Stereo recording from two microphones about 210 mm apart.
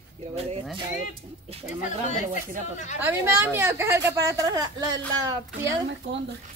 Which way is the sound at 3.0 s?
10° right (ahead or behind).